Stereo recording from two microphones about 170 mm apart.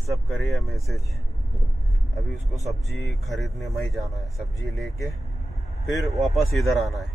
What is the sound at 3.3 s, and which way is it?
Speech, centre (ahead or behind).